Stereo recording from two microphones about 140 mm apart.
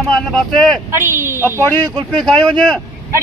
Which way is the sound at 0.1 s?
5° left (ahead or behind).